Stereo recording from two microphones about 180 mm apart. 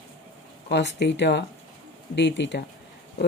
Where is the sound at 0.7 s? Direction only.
70° left (ahead or behind).